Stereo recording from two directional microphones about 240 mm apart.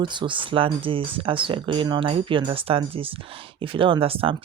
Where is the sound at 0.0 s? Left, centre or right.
Centre.